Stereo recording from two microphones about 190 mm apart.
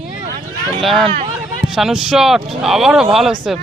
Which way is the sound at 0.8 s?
Centre (ahead or behind).